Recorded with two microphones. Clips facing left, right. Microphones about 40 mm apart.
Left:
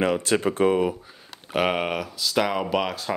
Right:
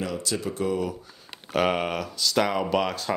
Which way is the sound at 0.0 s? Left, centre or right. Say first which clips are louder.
Left 7 dB; left.